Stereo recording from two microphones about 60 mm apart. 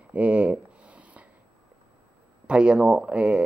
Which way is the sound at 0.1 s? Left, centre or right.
Right.